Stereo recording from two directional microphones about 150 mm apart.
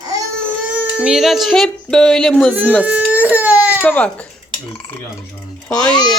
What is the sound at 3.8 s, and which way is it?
Speech, 10° left (ahead or behind).